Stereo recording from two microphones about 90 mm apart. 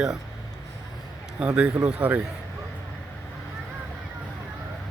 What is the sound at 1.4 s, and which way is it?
Speech, 10° right (ahead or behind).